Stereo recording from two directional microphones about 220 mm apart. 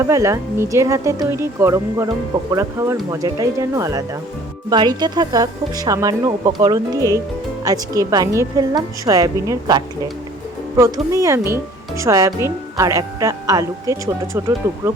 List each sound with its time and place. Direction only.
0.0 s speech: 15° right (ahead or behind)